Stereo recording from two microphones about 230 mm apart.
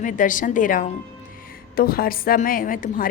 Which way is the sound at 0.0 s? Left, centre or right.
Left.